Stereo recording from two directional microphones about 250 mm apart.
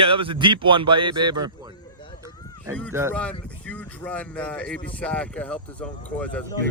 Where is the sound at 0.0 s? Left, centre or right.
Right.